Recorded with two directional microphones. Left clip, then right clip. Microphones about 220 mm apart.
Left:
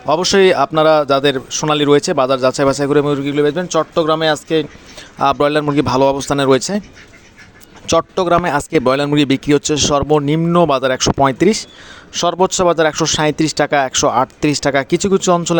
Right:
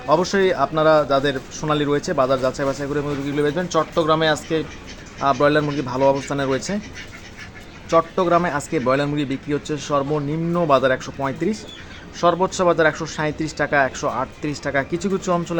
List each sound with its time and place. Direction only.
0.1 s a man's voice: 40° left (ahead or behind)
7.9 s a man's voice: 45° left (ahead or behind)